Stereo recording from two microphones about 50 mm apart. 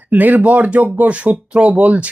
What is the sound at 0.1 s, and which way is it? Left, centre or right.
Speech, right.